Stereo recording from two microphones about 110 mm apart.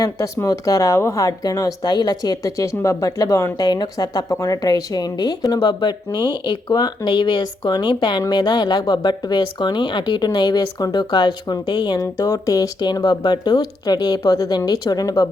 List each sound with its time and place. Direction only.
0.0 s a woman's voice: 30° left (ahead or behind)
3.7 s a woman's voice: 40° left (ahead or behind)